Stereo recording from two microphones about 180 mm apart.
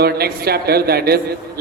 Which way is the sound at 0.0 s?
60° right (ahead or behind).